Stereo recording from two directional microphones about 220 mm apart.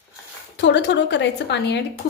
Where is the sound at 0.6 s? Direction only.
55° left (ahead or behind).